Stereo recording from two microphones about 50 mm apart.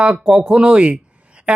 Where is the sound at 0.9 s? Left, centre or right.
Right.